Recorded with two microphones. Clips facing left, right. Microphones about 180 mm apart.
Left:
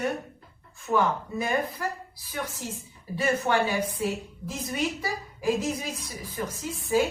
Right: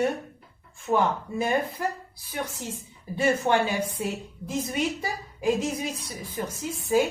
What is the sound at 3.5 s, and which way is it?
Speech, 25° right (ahead or behind).